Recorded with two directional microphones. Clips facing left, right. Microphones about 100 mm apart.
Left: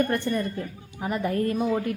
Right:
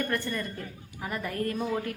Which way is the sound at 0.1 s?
25° left (ahead or behind).